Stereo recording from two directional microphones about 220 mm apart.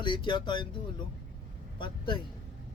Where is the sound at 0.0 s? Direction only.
20° left (ahead or behind).